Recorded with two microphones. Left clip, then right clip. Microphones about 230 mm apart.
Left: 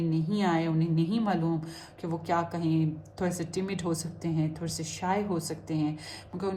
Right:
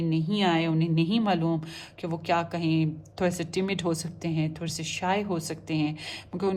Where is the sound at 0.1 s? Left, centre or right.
Right.